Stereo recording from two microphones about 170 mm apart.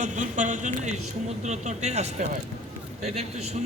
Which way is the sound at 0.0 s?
45° right (ahead or behind).